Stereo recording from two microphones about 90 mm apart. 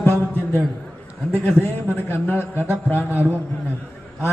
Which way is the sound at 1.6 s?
25° left (ahead or behind).